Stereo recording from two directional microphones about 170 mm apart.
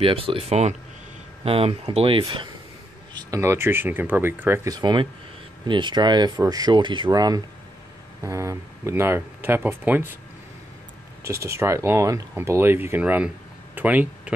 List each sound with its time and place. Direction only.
0.0 s speech: 35° right (ahead or behind)
3.2 s speech: 20° right (ahead or behind)
4.7 s speech: 25° right (ahead or behind)
11.2 s speech: 15° right (ahead or behind)